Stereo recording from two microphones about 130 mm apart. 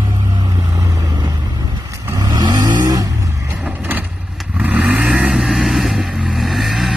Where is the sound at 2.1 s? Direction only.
35° right (ahead or behind).